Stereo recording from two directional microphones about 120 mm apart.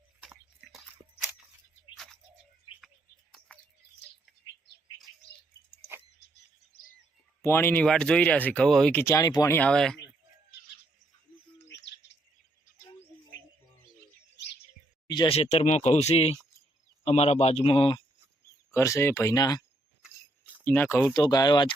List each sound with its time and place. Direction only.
7.4 s speech: 20° left (ahead or behind)
7.9 s speech: 10° left (ahead or behind)
9.1 s speech: 30° left (ahead or behind)
9.5 s speech: 10° left (ahead or behind)
15.0 s a sound: 35° left (ahead or behind)
15.3 s speech: 60° left (ahead or behind)
18.7 s speech: 25° left (ahead or behind)
19.4 s speech: 35° left (ahead or behind)
20.0 s dog: 15° right (ahead or behind)
20.7 s speech: 15° left (ahead or behind)
21.1 s speech: 35° left (ahead or behind)